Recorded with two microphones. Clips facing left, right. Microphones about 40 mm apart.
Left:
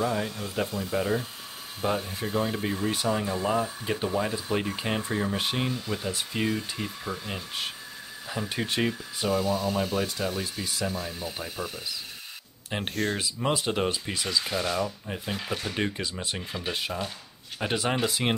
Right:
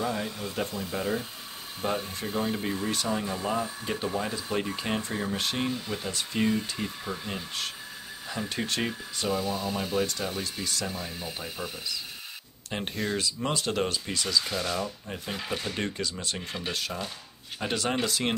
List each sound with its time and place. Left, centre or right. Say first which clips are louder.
0.0 s speech: left 2 dB; centre
5.7 s speech: left 1 dB; centre
10.9 s speech: left 2 dB; centre
12.6 s speech: left 2 dB; centre
15.7 s speech: left 2 dB; centre
17.6 s speech: left 2 dB; centre